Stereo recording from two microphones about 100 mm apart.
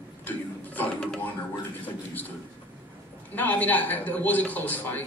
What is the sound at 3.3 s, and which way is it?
A man's voice, 15° left (ahead or behind).